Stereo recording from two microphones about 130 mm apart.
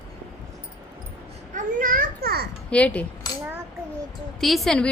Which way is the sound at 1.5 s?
85° right.